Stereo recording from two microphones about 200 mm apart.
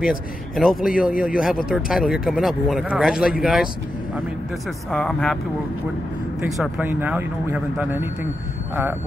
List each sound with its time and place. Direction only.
0.0 s a man's voice: 5° right (ahead or behind)
0.7 s speech: 45° left (ahead or behind)
1.7 s a man's voice: centre (ahead or behind)
4.9 s a man's voice: 5° left (ahead or behind)
6.4 s speech: 5° right (ahead or behind)